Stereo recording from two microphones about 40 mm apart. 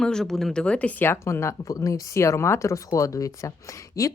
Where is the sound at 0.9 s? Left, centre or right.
Left.